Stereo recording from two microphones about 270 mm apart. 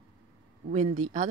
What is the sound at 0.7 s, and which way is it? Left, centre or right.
Speech, right.